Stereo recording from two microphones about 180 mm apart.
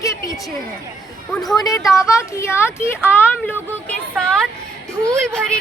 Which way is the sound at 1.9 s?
15° left (ahead or behind).